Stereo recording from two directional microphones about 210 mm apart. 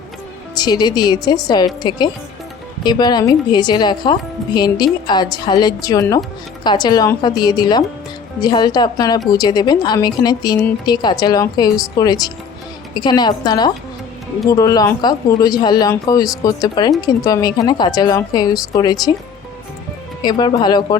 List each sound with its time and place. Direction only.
0.5 s speech: 20° left (ahead or behind)
20.2 s speech: 20° left (ahead or behind)